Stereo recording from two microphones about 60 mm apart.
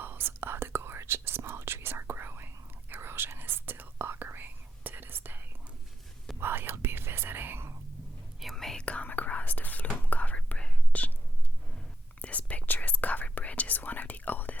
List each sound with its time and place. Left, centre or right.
0.0 s whispering: right
8.4 s whispering: centre
8.8 s whispering: left
12.2 s whispering: left